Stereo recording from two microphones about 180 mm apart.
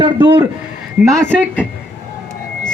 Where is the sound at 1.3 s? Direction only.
5° left (ahead or behind).